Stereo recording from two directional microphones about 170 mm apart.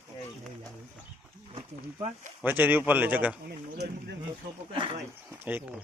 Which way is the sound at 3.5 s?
70° right (ahead or behind).